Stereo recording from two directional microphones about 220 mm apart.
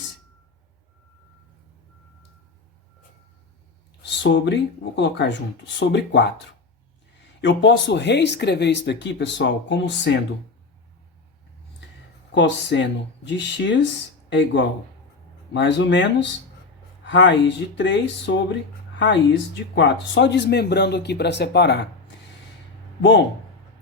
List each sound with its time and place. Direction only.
4.0 s speech: 55° left (ahead or behind)
7.4 s speech: 50° left (ahead or behind)
12.3 s speech: 55° left (ahead or behind)
23.0 s speech: 55° left (ahead or behind)